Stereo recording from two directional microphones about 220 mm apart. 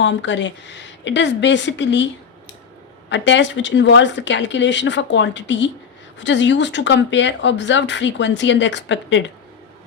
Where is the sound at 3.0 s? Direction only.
55° left (ahead or behind).